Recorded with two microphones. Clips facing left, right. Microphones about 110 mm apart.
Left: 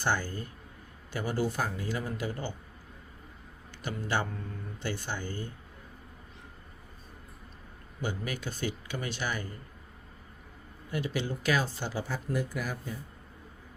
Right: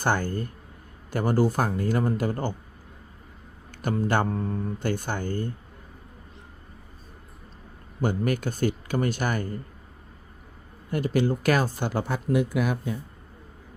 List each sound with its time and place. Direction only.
0.0 s speech: 50° right (ahead or behind)
3.7 s music: 50° right (ahead or behind)
4.1 s speech: 50° right (ahead or behind)
8.0 s speech: 50° right (ahead or behind)
10.9 s speech: 50° right (ahead or behind); by 13.0 s 70° right (ahead or behind)